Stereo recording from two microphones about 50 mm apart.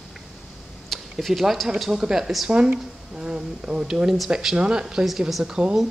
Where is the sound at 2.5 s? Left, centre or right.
Right.